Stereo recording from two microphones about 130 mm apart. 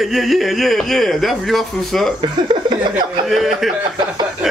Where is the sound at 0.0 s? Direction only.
Centre (ahead or behind).